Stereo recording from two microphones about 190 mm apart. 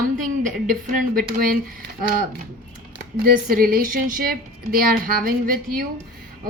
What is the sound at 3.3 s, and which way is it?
Speech, 50° right (ahead or behind).